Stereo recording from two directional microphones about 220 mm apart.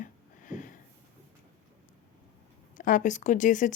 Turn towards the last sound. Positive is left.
turn(degrees=35)  # may be behind; listen again after turning